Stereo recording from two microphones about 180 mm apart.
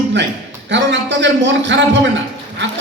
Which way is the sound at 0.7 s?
80° right.